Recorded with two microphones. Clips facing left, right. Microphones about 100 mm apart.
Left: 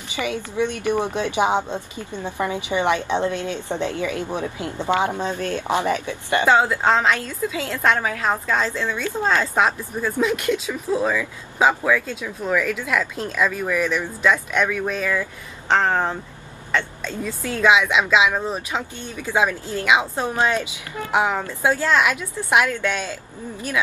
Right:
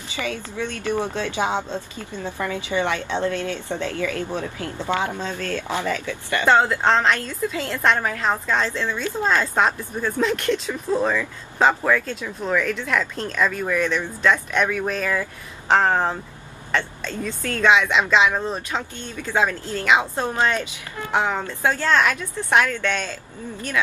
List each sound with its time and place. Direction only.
0.1 s speech: 15° left (ahead or behind)
6.4 s speech: 5° left (ahead or behind)
16.7 s speech: 5° left (ahead or behind)